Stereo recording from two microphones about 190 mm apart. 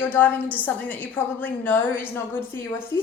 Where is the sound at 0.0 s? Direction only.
10° left (ahead or behind).